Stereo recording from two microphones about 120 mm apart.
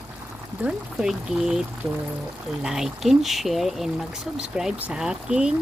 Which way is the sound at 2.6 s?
5° right (ahead or behind).